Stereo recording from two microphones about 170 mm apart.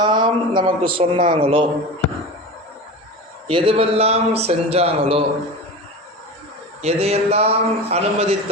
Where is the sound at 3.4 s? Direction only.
30° right (ahead or behind).